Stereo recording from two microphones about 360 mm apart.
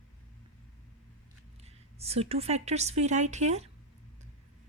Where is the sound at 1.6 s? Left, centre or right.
Centre.